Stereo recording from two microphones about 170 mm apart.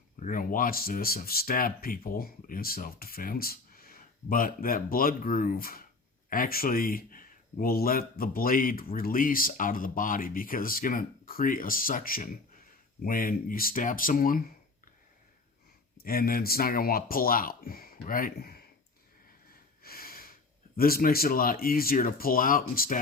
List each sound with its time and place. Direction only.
0.2 s speech: 55° left (ahead or behind)
16.0 s speech: 60° left (ahead or behind)
19.8 s snort: 60° left (ahead or behind)
20.7 s speech: 60° left (ahead or behind)